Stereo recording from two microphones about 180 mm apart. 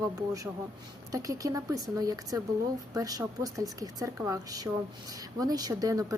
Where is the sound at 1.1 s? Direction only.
20° right (ahead or behind).